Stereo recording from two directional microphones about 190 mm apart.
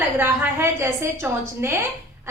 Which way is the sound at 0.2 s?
10° right (ahead or behind).